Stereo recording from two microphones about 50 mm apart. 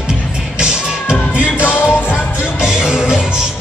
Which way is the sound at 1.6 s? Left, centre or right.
Left.